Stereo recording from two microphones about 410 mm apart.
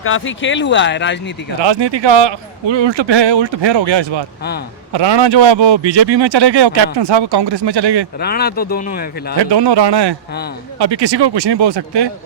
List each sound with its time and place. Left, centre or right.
0.0 s speech: left
1.6 s a man's voice: right
8.2 s speech: left
9.4 s a man's voice: right